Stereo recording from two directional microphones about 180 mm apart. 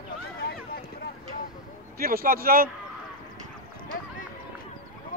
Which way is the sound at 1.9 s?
55° right (ahead or behind).